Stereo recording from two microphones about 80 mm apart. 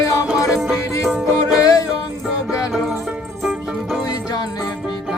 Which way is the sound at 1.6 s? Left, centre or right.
Left.